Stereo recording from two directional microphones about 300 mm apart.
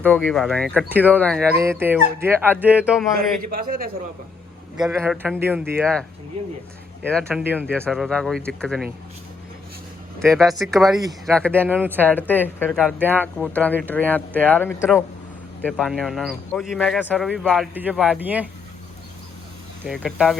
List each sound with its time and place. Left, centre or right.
0.0 s speech: centre
1.5 s speech: centre
3.5 s a man's voice: right
4.9 s speech: centre
7.1 s speech: centre
10.2 s speech: centre
10.9 s speech: centre
11.9 s speech: centre
13.2 s speech: centre
19.8 s speech: centre